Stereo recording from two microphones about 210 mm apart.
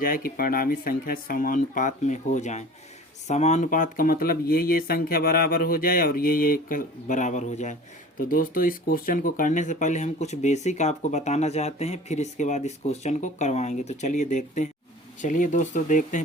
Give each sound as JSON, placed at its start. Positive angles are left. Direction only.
{"t": 0.0, "sound": "speech", "side_deg": 45}